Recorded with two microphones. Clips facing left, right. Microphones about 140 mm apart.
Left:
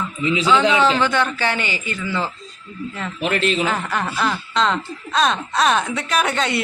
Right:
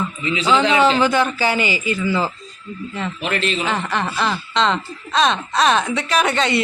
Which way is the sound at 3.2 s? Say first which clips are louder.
Left 3 dB; 40° left (ahead or behind).